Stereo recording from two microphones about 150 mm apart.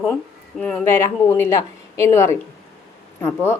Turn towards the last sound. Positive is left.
turn(degrees=15)  # may be behind; listen again after turning